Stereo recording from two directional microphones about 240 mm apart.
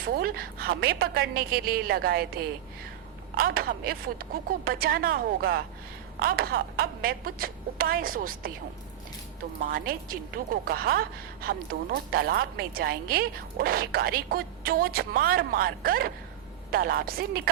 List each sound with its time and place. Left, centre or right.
0.0 s a woman's voice: right
9.6 s a woman's voice: right